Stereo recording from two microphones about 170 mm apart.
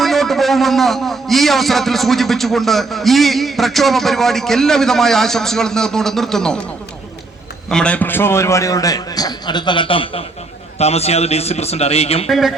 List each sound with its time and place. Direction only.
0.0 s a man's voice: centre (ahead or behind)
7.7 s a man's voice: 5° left (ahead or behind); by 12.3 s 35° left (ahead or behind)
12.3 s a man's voice: centre (ahead or behind)